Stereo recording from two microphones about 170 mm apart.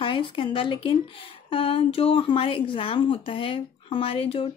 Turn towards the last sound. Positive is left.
turn(degrees=35)  # may be behind; listen again after turning